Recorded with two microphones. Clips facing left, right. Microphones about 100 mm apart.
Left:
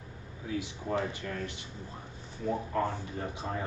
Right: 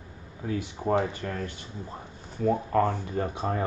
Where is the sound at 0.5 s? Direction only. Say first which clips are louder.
Right 6 dB; 50° right (ahead or behind).